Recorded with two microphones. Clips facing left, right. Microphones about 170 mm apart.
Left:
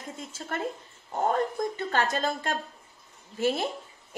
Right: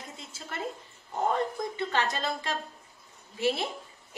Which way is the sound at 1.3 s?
50° left (ahead or behind).